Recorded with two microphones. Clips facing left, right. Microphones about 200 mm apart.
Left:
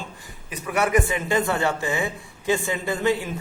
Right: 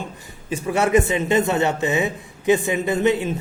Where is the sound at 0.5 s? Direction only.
25° right (ahead or behind).